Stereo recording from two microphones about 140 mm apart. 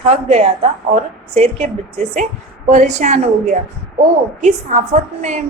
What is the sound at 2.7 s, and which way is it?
A woman's voice, 60° right (ahead or behind).